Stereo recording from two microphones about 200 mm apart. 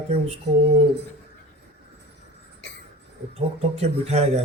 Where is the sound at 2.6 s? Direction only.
60° left (ahead or behind).